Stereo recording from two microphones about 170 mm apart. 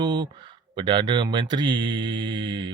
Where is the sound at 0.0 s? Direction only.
25° right (ahead or behind).